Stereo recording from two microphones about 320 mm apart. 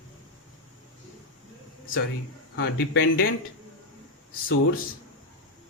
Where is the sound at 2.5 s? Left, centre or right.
Left.